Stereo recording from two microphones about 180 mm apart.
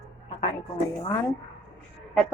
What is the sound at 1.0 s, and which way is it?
Speech, 15° left (ahead or behind).